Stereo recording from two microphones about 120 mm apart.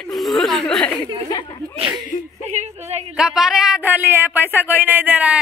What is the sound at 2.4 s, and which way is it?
Speech, 65° right (ahead or behind).